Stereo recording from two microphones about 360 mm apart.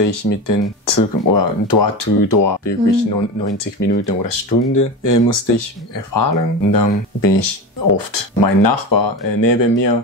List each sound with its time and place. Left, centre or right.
0.0 s speech: left